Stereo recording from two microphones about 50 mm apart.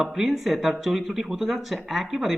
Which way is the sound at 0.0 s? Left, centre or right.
Centre.